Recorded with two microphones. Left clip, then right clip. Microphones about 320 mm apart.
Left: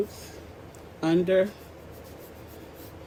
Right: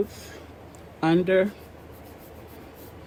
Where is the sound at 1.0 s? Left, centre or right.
Right.